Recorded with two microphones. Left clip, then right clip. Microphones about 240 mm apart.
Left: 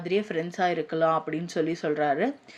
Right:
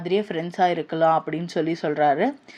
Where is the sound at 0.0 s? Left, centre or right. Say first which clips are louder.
Right 3 dB; centre.